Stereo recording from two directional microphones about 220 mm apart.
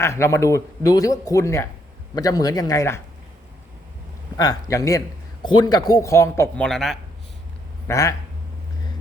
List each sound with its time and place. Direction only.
0.0 s a man's voice: 10° left (ahead or behind)
4.4 s a man's voice: 15° left (ahead or behind)
6.7 s speech: centre (ahead or behind)
7.9 s a man's voice: 15° left (ahead or behind)